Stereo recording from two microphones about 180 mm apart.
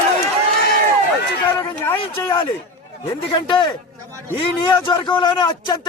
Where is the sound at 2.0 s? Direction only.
30° left (ahead or behind).